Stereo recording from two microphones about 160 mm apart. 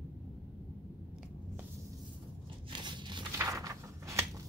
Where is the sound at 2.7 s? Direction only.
30° right (ahead or behind).